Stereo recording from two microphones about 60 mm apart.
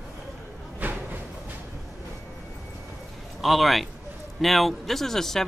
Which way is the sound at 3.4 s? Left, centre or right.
Centre.